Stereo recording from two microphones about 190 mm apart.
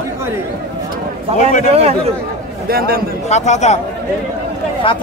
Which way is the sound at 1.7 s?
35° right (ahead or behind).